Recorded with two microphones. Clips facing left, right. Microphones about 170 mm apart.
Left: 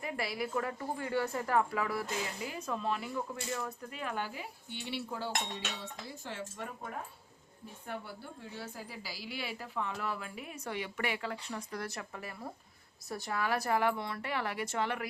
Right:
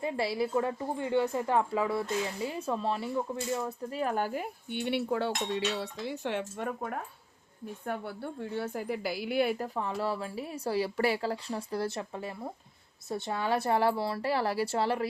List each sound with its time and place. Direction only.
0.0 s a woman's voice: 30° right (ahead or behind)